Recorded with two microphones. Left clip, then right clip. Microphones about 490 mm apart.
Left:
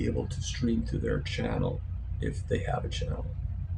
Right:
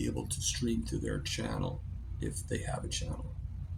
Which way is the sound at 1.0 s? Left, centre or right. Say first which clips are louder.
Left 7 dB; right.